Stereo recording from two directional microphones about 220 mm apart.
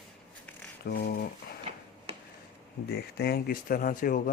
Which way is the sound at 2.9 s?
45° left (ahead or behind).